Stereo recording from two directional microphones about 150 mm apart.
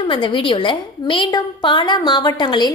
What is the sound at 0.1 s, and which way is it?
A woman's voice, 35° left (ahead or behind).